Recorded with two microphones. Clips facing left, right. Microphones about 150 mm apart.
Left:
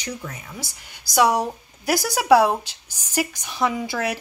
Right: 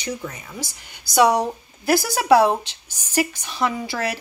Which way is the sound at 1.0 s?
10° left (ahead or behind).